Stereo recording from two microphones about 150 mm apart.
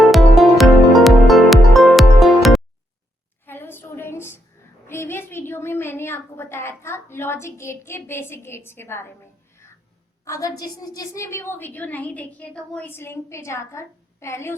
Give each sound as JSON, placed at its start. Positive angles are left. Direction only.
{"t": 0.0, "sound": "music", "side_deg": 0}
{"t": 3.4, "sound": "a sound", "side_deg": 15}
{"t": 10.2, "sound": "a woman's voice", "side_deg": 20}